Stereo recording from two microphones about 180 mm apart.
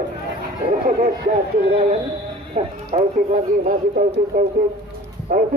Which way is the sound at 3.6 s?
45° right (ahead or behind).